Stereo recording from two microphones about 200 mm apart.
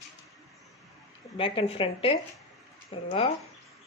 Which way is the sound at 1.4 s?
25° left (ahead or behind).